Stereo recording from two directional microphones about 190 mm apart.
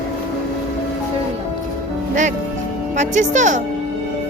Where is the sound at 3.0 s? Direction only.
40° right (ahead or behind).